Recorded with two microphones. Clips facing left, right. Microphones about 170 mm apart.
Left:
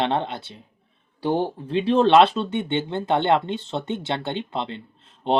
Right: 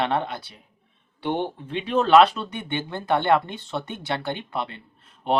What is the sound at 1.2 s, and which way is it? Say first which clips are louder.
Speech: left 3 dB; 35° left (ahead or behind).